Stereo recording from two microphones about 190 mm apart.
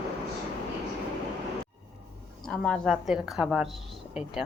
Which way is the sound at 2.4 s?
Centre (ahead or behind).